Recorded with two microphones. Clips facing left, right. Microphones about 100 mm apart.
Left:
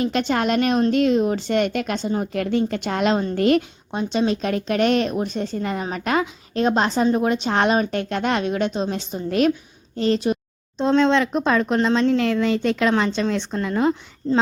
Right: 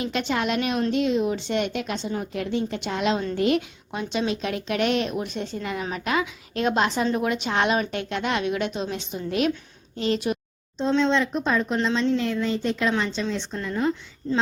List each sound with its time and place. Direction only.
0.0 s a woman's voice: 45° left (ahead or behind)
3.9 s a woman's voice: 35° left (ahead or behind)
10.8 s speech: 60° left (ahead or behind); by 12.9 s 75° left (ahead or behind)
12.9 s speech: 55° left (ahead or behind)